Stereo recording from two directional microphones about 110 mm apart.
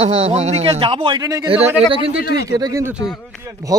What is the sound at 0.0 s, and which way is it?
A man's voice, 60° right (ahead or behind).